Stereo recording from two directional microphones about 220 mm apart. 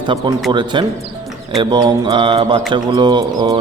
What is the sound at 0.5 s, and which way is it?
Speech, 20° right (ahead or behind).